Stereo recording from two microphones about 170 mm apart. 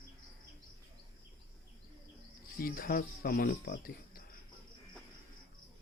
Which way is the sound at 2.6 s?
60° left (ahead or behind).